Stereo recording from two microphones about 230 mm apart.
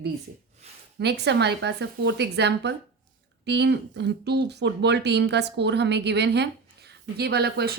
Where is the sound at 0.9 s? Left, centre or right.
Right.